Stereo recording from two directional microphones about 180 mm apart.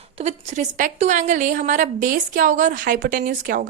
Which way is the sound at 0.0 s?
35° right (ahead or behind).